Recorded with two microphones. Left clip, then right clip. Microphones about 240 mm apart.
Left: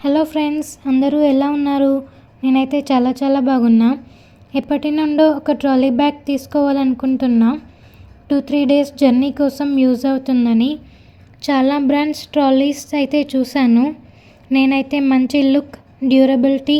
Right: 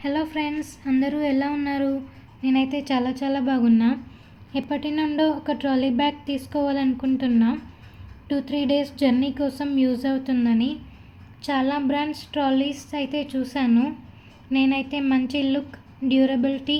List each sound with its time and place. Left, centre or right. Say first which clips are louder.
0.0 s a woman's voice: left 9 dB; left